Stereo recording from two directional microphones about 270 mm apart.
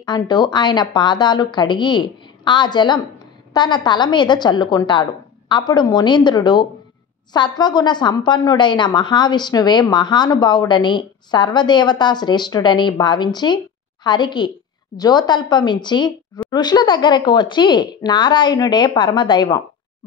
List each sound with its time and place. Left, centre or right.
0.0 s a woman's voice: centre